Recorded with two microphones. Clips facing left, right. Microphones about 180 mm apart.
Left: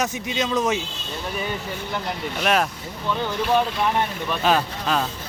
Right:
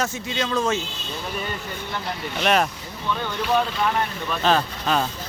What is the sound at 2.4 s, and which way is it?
Speech, centre (ahead or behind).